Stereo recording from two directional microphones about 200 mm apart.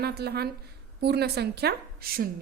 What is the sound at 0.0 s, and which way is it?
A woman's voice, 55° right (ahead or behind).